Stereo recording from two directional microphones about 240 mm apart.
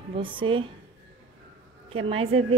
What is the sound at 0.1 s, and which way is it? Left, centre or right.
Speech, right.